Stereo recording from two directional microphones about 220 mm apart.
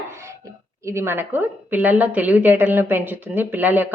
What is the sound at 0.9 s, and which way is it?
A woman's voice, 10° right (ahead or behind).